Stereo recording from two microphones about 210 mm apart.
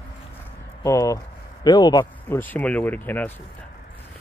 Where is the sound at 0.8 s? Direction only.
15° left (ahead or behind).